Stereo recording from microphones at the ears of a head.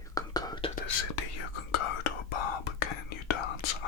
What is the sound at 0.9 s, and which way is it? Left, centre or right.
Whispering, left.